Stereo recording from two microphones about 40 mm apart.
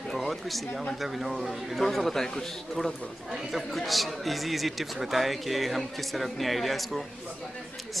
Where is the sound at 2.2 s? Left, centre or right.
Centre.